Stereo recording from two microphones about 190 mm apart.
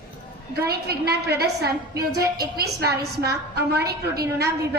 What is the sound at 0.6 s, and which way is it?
A woman's voice, 55° right (ahead or behind).